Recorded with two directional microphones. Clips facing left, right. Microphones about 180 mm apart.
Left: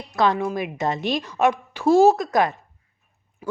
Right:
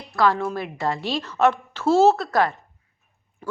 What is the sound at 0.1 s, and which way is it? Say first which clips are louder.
A woman's voice: even; 20° left (ahead or behind).